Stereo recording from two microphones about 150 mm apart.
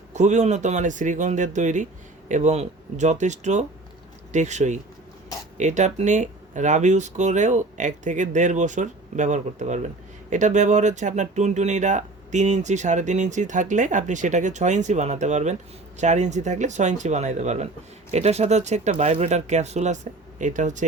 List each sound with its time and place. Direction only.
0.1 s speech: 50° right (ahead or behind)